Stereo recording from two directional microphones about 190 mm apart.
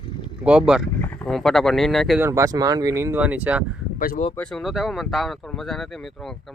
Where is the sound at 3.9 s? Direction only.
45° left (ahead or behind).